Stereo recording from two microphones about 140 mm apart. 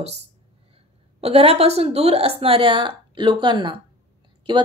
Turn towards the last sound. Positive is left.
turn(degrees=-35)  # may be behind; listen again after turning